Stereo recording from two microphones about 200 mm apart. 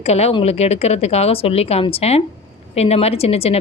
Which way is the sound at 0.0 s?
30° left (ahead or behind).